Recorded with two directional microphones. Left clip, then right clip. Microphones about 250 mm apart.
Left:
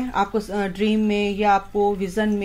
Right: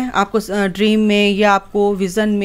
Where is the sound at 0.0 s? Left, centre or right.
Right.